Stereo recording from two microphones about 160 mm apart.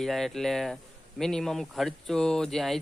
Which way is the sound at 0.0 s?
Centre (ahead or behind).